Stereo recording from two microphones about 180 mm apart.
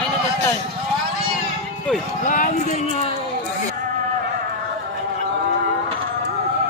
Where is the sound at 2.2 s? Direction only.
45° left (ahead or behind).